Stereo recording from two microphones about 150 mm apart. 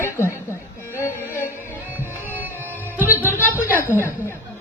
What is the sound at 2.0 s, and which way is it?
Music, 15° left (ahead or behind).